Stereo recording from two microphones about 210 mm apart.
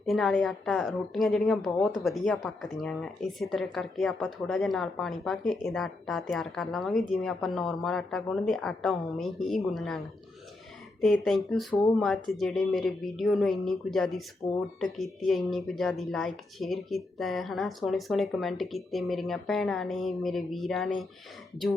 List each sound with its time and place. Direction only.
0.0 s speech: centre (ahead or behind)
11.0 s speech: centre (ahead or behind)
14.4 s speech: 15° left (ahead or behind)
14.9 s speech: centre (ahead or behind)